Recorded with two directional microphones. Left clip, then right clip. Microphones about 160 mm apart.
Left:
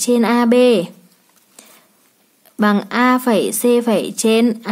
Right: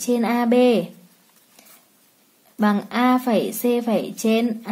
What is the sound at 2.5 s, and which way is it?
Speech, 25° left (ahead or behind).